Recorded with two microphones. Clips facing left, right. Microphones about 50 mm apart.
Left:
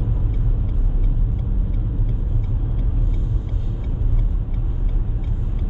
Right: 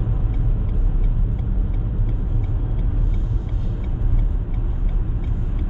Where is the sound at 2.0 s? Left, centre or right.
Centre.